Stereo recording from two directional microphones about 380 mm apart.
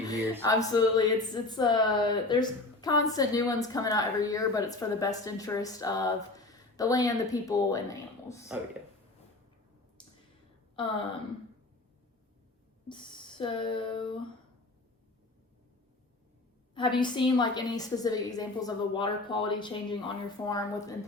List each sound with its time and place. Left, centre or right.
0.1 s speech: centre
12.9 s a sound: centre
16.7 s speech: centre